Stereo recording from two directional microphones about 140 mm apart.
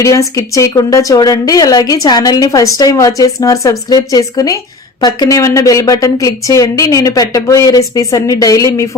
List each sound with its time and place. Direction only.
0.0 s a woman's voice: 25° left (ahead or behind)